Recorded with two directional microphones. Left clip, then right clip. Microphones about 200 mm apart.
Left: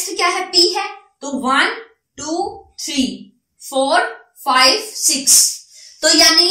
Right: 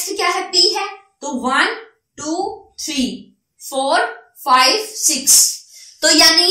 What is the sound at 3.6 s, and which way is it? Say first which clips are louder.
A child's voice: left 1 dB; 15° right (ahead or behind).